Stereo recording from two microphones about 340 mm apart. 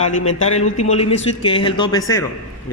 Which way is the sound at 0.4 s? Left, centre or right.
Centre.